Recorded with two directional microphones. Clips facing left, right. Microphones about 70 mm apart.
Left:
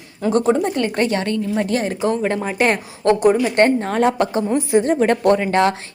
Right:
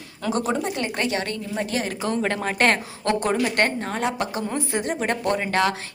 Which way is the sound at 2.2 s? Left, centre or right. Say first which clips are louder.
Left 3 dB; centre.